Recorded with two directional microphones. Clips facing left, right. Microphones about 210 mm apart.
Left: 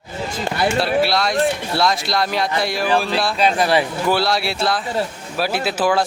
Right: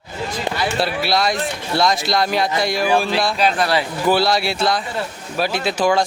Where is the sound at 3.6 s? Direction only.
15° left (ahead or behind).